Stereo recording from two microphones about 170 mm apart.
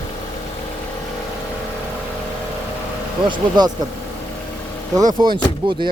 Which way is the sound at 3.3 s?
25° right (ahead or behind).